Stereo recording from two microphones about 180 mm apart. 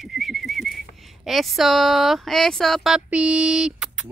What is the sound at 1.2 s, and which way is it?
Speech, centre (ahead or behind).